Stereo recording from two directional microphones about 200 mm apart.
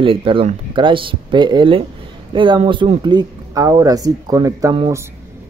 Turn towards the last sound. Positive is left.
turn(degrees=-15)  # may be behind; listen again after turning